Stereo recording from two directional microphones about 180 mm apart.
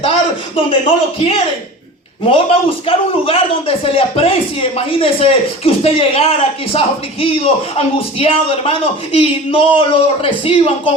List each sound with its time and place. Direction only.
0.5 s a man's voice: 30° left (ahead or behind)